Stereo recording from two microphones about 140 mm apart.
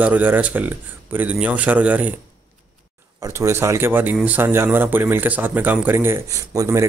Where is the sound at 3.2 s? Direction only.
20° right (ahead or behind).